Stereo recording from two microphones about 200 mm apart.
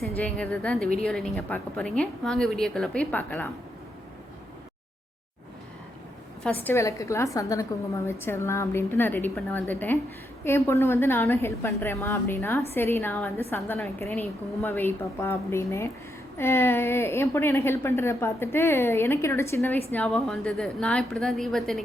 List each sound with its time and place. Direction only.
0.2 s a woman's voice: 5° left (ahead or behind)
6.4 s a woman's voice: 10° left (ahead or behind)